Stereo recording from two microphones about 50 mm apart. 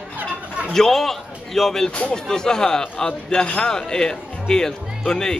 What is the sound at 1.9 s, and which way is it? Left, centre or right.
Speech, left.